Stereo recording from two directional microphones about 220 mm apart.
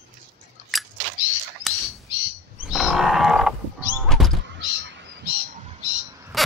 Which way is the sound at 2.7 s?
Centre (ahead or behind).